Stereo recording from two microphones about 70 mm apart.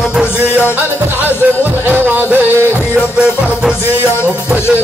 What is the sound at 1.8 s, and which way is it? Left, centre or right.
Music, right.